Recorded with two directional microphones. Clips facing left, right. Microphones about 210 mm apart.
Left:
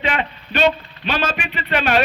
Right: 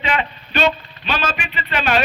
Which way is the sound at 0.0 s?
55° left (ahead or behind).